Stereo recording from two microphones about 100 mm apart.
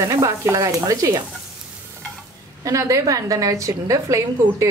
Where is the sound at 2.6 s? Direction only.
30° right (ahead or behind).